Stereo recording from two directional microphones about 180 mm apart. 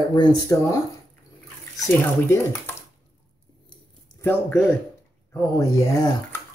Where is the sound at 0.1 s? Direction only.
20° left (ahead or behind).